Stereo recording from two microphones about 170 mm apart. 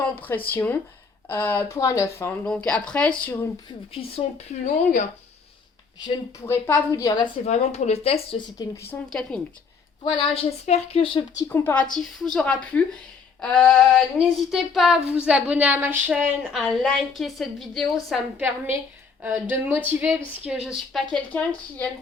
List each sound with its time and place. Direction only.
0.0 s speech: 10° left (ahead or behind)
3.9 s speech: 35° left (ahead or behind)
6.4 s speech: 10° left (ahead or behind)
7.4 s a woman's voice: 40° left (ahead or behind)
9.0 s female singing: 5° left (ahead or behind)
10.0 s a woman's voice: 30° left (ahead or behind)
11.4 s speech: 10° left (ahead or behind)
11.9 s female singing: centre (ahead or behind)
18.4 s speech: 15° right (ahead or behind)
20.4 s female singing: 5° right (ahead or behind)